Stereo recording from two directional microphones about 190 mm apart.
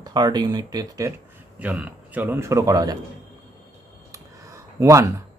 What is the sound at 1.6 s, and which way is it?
A man's voice, 5° right (ahead or behind).